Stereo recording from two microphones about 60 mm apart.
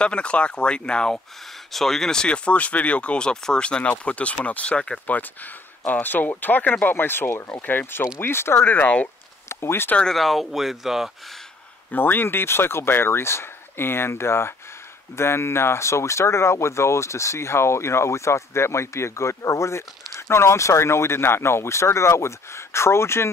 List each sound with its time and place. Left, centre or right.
0.0 s speech: centre
5.0 s speech: left
8.5 s speech: left
9.5 s speech: left
10.1 s speech: centre
11.9 s speech: left